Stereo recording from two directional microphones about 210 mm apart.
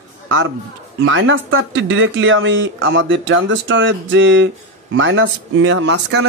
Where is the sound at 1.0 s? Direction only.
65° right (ahead or behind).